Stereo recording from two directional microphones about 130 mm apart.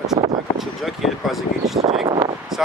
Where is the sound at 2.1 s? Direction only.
35° right (ahead or behind).